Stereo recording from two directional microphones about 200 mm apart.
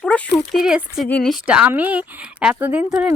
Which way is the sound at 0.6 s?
5° right (ahead or behind).